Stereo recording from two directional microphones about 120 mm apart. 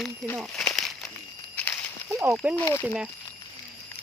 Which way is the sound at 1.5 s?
15° left (ahead or behind).